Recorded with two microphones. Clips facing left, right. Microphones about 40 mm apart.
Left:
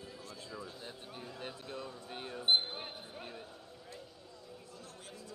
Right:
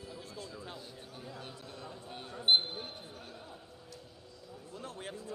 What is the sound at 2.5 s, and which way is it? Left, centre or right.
Basketball bounce, right.